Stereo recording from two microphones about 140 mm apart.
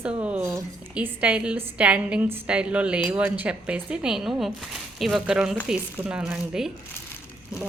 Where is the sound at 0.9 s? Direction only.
10° right (ahead or behind).